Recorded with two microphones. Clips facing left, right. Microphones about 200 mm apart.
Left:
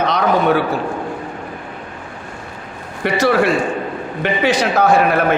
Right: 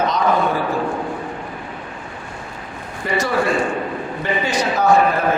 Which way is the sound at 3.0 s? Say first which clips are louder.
Left 5 dB; 75° left (ahead or behind).